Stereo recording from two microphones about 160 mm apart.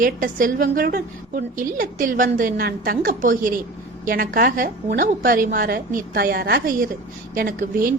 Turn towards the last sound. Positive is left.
turn(degrees=-60)  # may be behind; listen again after turning